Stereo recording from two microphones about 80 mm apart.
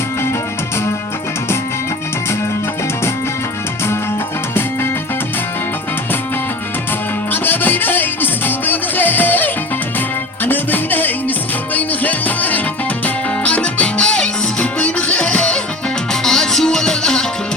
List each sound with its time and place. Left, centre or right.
7.4 s music: left; by 17.2 s centre